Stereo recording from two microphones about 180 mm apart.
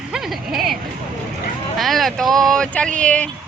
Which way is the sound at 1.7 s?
Centre (ahead or behind).